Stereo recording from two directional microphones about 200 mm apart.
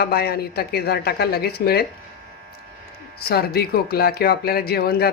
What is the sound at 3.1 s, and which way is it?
Speech, 50° left (ahead or behind).